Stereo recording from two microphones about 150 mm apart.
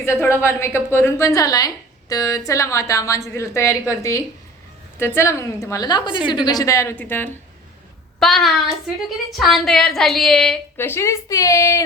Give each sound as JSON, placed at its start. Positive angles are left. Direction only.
{"t": 0.0, "sound": "a woman's voice", "side_deg": 20}
{"t": 10.8, "sound": "a woman's voice", "side_deg": 15}